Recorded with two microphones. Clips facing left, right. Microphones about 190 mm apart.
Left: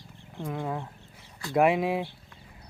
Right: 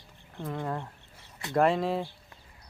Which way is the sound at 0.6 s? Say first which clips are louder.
Even; 10° left (ahead or behind).